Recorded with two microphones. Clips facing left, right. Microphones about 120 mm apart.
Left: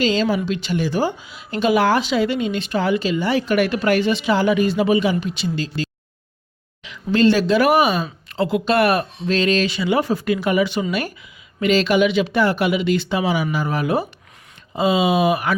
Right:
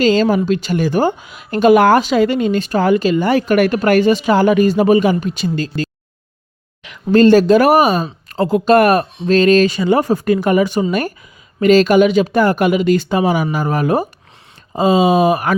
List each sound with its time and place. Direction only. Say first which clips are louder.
0.0 s a woman's voice: right 6 dB; 45° right (ahead or behind)